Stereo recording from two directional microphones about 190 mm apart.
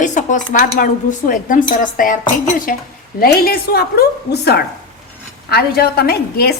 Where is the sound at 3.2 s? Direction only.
50° left (ahead or behind).